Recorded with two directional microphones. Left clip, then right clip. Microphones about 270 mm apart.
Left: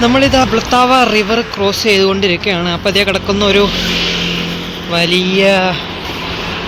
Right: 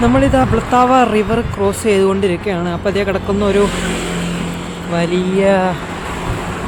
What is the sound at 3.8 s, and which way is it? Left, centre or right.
Vehicle, right.